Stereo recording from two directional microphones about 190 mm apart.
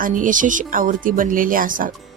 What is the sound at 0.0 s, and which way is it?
Speech, 45° right (ahead or behind).